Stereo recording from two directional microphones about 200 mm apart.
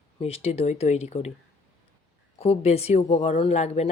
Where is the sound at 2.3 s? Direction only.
30° left (ahead or behind).